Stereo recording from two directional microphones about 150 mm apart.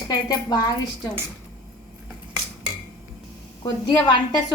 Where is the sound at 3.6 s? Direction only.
30° left (ahead or behind).